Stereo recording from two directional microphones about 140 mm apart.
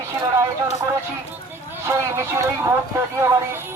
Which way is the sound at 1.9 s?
20° right (ahead or behind).